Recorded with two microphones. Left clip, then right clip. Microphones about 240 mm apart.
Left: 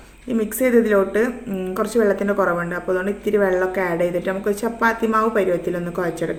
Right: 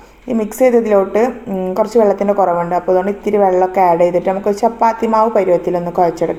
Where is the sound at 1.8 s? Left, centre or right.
Right.